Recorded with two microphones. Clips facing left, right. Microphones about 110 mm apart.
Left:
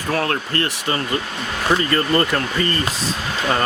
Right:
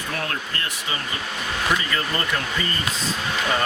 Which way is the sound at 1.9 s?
55° left (ahead or behind).